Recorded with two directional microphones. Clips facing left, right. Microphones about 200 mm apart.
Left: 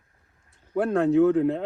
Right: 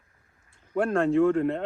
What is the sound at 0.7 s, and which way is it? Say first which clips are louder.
Speech: left 2 dB; 5° left (ahead or behind).